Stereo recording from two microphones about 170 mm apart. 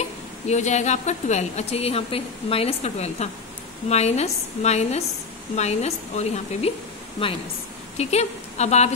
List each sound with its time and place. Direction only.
0.5 s a woman's voice: 40° left (ahead or behind)